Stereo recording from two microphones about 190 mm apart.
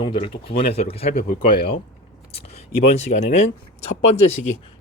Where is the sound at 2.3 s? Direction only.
35° left (ahead or behind).